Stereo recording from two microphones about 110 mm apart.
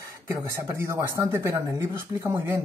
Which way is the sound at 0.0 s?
25° right (ahead or behind).